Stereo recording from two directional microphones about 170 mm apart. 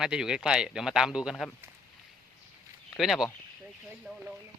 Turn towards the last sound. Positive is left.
turn(degrees=0)  # may be behind; listen again after turning